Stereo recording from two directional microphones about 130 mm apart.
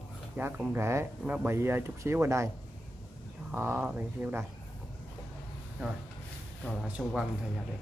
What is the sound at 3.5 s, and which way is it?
Speech, 15° right (ahead or behind).